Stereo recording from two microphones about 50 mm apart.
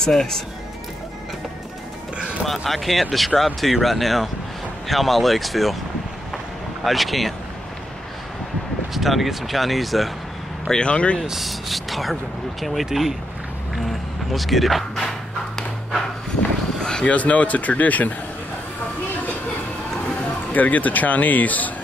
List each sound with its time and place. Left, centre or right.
0.0 s speech: centre
2.4 s speech: centre
6.3 s vehicle: centre
8.9 s speech: centre
10.7 s speech: left
11.2 s speech: centre
14.3 s speech: centre
17.0 s speech: left
20.5 s speech: left